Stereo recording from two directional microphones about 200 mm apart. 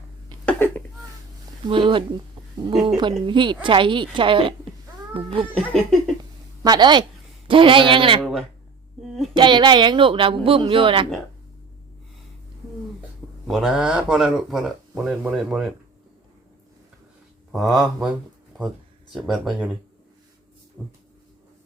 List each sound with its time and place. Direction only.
1.6 s speech: 25° right (ahead or behind)
5.5 s speech: 5° left (ahead or behind)
6.6 s a woman's voice: 20° right (ahead or behind)
8.2 s speech: centre (ahead or behind)
9.3 s speech: 25° right (ahead or behind)
13.5 s speech: centre (ahead or behind)
17.5 s speech: centre (ahead or behind)
19.1 s speech: centre (ahead or behind)
20.8 s speech: centre (ahead or behind)